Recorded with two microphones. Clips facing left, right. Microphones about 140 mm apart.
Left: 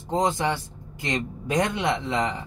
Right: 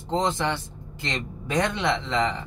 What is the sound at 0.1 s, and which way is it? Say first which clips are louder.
A man's voice: left 1 dB; 10° left (ahead or behind).